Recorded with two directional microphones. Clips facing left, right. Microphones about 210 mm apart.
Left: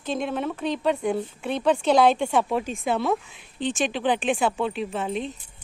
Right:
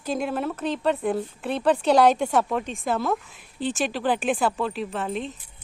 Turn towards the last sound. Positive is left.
turn(degrees=0)  # may be behind; listen again after turning